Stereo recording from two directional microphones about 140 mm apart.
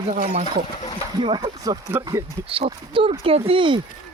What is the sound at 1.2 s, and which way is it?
Speech, 35° right (ahead or behind).